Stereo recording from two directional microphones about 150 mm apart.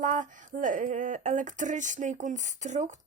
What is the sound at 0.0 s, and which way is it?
Speech, 55° right (ahead or behind).